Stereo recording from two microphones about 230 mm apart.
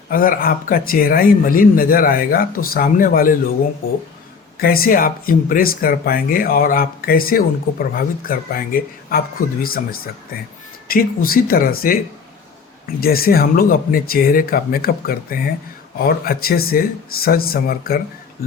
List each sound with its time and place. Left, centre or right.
0.1 s speech: left
4.5 s speech: left
13.0 s speech: left